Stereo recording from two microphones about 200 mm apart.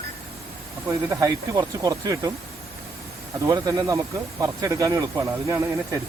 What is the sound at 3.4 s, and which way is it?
Speech, 15° right (ahead or behind).